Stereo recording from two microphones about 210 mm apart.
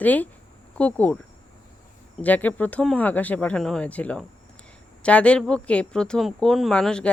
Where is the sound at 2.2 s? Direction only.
10° left (ahead or behind).